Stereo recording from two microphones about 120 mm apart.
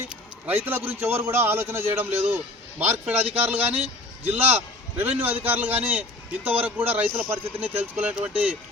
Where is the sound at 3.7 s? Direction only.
60° right (ahead or behind).